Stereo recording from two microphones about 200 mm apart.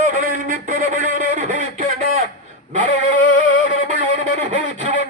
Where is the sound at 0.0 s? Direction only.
40° right (ahead or behind).